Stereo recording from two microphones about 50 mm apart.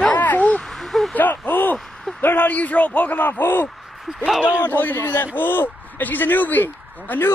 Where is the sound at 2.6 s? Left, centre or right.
Left.